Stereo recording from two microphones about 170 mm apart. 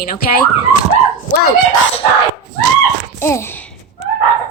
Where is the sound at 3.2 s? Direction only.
15° left (ahead or behind).